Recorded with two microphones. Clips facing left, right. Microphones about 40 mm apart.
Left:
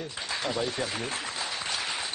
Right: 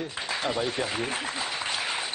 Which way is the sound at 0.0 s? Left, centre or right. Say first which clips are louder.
Right 3 dB; centre.